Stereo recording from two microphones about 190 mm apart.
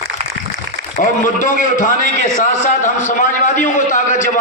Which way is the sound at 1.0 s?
40° left (ahead or behind).